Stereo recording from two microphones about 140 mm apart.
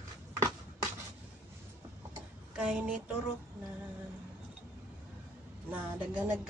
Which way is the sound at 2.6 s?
10° right (ahead or behind).